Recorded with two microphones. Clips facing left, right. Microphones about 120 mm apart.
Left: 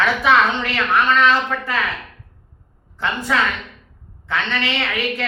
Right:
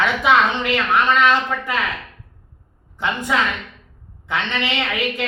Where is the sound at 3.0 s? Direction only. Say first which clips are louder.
Even; 15° right (ahead or behind).